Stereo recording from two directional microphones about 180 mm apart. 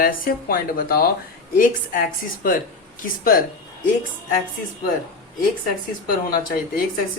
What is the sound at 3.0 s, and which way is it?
Speech, 50° left (ahead or behind).